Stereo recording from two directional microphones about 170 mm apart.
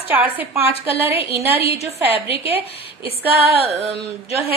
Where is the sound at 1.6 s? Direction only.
35° left (ahead or behind).